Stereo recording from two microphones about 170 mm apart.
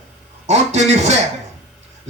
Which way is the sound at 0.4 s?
40° right (ahead or behind).